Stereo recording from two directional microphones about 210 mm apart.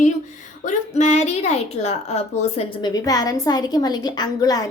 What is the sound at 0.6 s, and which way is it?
A woman's voice, 35° left (ahead or behind).